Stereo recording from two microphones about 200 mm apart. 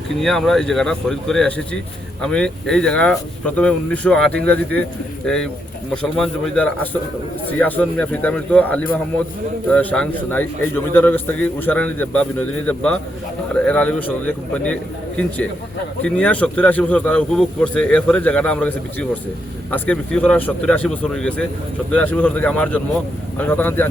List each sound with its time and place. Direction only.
0.2 s a man's voice: centre (ahead or behind)